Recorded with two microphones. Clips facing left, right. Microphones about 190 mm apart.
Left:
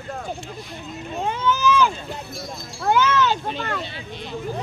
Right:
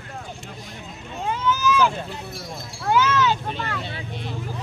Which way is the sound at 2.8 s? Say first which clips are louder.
Left 1 dB; 55° left (ahead or behind).